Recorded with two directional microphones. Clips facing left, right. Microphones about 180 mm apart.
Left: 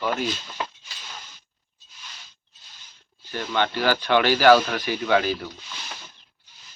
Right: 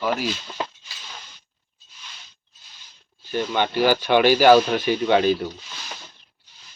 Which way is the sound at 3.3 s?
15° right (ahead or behind).